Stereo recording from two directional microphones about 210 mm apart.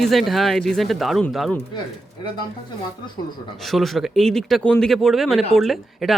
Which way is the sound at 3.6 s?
Centre (ahead or behind).